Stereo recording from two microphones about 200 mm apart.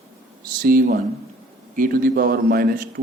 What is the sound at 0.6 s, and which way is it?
Speech, 45° right (ahead or behind).